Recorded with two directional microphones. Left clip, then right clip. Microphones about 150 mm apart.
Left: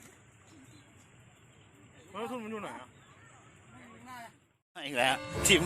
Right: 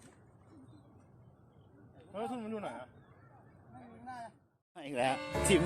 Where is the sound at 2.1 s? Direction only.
90° right.